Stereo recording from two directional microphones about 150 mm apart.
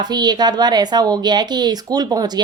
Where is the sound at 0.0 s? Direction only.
30° right (ahead or behind).